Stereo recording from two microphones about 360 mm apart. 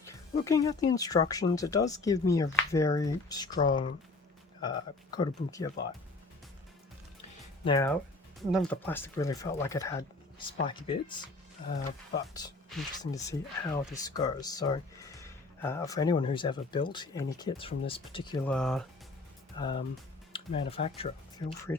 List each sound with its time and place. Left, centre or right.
0.0 s speech: centre
7.6 s speech: centre
12.3 s speech: centre
19.5 s speech: centre